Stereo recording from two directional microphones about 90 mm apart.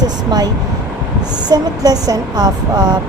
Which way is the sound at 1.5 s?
45° right (ahead or behind).